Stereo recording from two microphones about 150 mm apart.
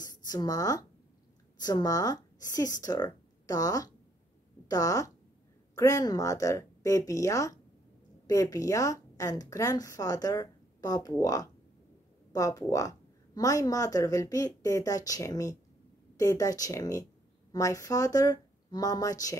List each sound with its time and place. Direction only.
0.0 s a woman's voice: 25° left (ahead or behind)